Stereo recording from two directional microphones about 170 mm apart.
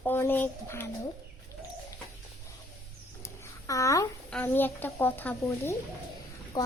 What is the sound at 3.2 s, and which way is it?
Babbling, 20° left (ahead or behind).